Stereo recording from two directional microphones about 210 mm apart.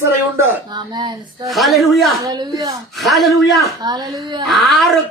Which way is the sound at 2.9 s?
Centre (ahead or behind).